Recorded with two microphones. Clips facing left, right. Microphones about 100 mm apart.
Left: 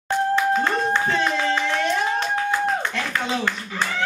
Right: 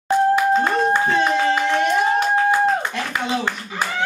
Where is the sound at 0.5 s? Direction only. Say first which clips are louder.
Right 3 dB; 15° right (ahead or behind).